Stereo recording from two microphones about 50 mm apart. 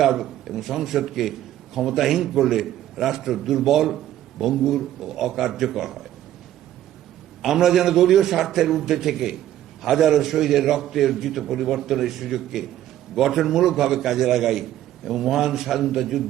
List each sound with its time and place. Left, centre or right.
0.0 s a man's voice: centre
7.4 s a man's voice: centre